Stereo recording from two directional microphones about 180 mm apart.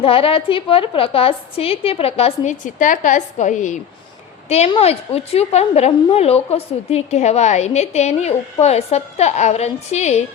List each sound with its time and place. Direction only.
0.0 s a woman's voice: 30° left (ahead or behind)